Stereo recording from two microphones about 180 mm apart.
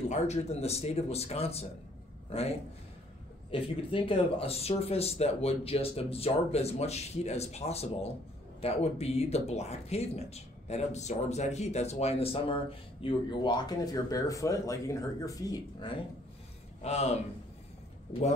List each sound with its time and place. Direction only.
0.1 s a man's voice: 40° left (ahead or behind)
16.8 s speech: 35° left (ahead or behind)